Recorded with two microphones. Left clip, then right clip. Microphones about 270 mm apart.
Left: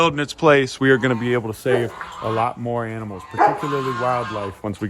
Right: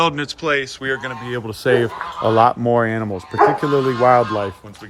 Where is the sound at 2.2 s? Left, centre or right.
Right.